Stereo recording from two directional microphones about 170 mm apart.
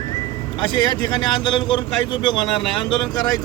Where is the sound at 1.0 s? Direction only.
25° left (ahead or behind).